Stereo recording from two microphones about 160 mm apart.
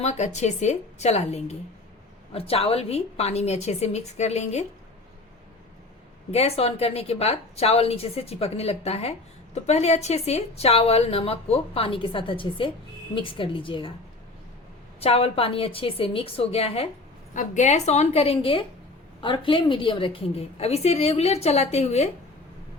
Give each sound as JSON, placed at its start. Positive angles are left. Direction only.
{"t": 0.0, "sound": "a woman's voice", "side_deg": 45}
{"t": 6.3, "sound": "a woman's voice", "side_deg": 40}
{"t": 15.0, "sound": "a woman's voice", "side_deg": 40}
{"t": 17.3, "sound": "a woman's voice", "side_deg": 50}